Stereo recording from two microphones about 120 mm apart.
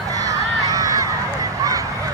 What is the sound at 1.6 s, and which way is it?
Honk, 30° right (ahead or behind).